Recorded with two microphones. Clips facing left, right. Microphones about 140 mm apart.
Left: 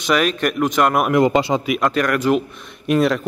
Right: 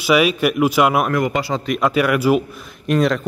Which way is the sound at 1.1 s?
25° left (ahead or behind).